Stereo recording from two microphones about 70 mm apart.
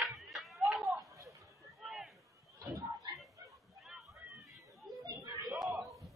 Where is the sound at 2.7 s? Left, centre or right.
Right.